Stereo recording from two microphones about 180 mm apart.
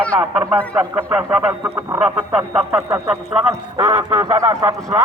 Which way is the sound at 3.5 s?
20° right (ahead or behind).